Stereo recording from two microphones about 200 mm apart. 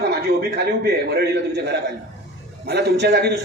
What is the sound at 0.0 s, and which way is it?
A man's voice, 55° right (ahead or behind).